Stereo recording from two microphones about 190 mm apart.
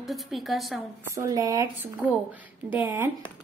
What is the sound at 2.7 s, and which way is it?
Speech, 10° right (ahead or behind).